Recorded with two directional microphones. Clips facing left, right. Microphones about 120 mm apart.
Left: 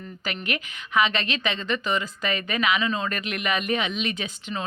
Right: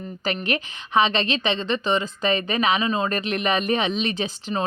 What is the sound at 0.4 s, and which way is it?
A woman's voice, 30° right (ahead or behind).